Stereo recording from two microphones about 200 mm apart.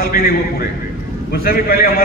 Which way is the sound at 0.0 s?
50° left (ahead or behind).